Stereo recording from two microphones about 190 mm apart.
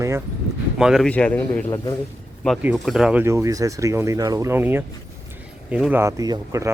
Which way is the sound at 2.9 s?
5° right (ahead or behind).